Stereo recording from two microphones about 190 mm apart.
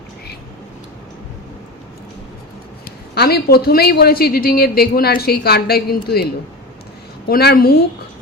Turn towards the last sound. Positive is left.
turn(degrees=55)  # may be behind; listen again after turning